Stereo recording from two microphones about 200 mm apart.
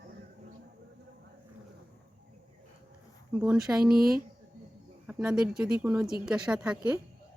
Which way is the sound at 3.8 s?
45° right (ahead or behind).